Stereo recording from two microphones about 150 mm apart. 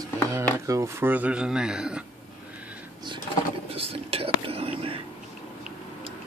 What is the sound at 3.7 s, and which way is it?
Whispering, 40° right (ahead or behind).